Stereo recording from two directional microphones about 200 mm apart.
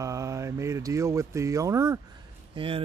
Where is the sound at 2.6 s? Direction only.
25° right (ahead or behind).